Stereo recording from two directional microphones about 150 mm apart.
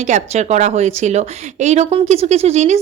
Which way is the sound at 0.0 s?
50° right (ahead or behind).